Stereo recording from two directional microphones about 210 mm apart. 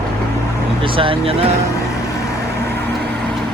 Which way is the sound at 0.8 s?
25° right (ahead or behind).